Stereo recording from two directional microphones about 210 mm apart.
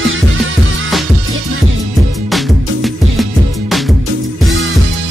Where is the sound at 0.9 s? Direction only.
Centre (ahead or behind).